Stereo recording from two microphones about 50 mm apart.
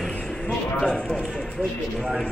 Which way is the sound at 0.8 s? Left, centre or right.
Centre.